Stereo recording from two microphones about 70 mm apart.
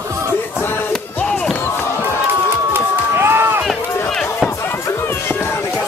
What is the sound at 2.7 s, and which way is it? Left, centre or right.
Run, right.